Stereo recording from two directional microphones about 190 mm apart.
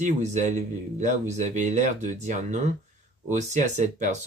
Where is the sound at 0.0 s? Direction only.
40° right (ahead or behind).